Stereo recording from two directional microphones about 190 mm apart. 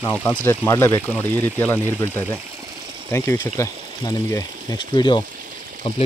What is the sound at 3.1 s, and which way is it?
Speech, 15° left (ahead or behind).